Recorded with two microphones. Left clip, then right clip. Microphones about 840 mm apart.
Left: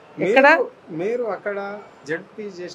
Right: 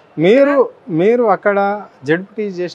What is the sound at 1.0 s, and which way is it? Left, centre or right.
Speech, right.